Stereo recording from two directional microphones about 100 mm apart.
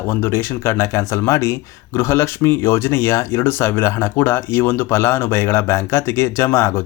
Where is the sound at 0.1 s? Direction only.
25° left (ahead or behind).